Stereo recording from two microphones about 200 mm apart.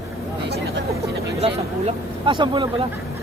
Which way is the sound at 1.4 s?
25° right (ahead or behind).